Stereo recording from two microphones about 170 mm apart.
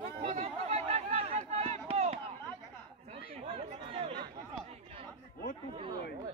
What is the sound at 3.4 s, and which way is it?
Run, 35° right (ahead or behind).